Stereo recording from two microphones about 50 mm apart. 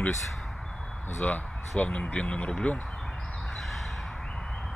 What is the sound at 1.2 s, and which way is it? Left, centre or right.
Speech, left.